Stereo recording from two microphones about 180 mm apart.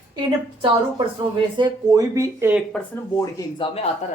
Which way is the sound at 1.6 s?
20° right (ahead or behind).